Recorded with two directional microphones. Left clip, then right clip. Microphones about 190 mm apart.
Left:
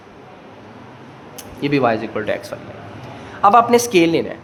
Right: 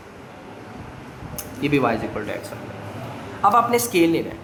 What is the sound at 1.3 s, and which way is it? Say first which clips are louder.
Speech: left 2 dB; 30° left (ahead or behind).